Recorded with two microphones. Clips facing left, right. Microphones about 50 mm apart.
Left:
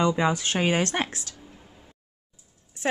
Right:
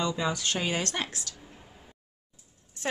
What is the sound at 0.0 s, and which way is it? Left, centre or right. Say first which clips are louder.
Speech: left 6 dB; left.